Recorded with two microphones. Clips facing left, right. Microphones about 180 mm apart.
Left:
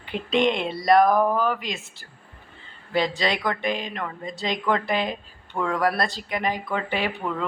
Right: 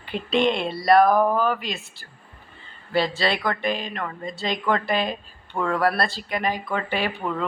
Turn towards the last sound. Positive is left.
turn(degrees=20)  # may be behind; listen again after turning